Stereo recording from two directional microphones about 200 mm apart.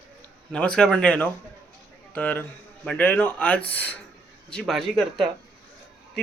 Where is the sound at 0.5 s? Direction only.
5° left (ahead or behind).